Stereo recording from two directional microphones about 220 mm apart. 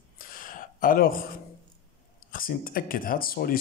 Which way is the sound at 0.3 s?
40° left (ahead or behind).